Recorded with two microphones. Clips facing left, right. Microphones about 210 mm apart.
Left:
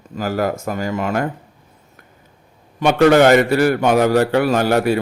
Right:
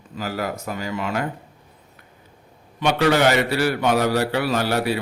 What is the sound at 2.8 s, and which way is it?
A man's voice, 50° left (ahead or behind).